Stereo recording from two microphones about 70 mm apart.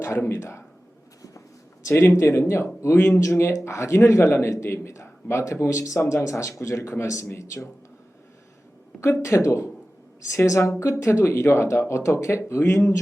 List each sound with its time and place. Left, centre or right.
0.0 s speech: left
1.9 s speech: left
9.0 s speech: left